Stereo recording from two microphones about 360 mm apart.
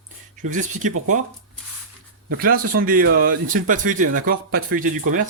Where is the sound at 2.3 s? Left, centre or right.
Right.